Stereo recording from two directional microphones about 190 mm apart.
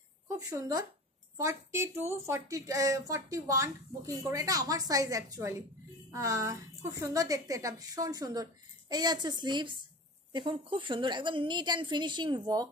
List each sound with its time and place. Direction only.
0.5 s a woman's voice: 20° right (ahead or behind)